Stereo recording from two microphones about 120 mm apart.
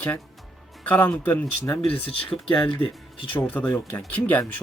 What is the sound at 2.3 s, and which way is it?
Speech, 50° left (ahead or behind).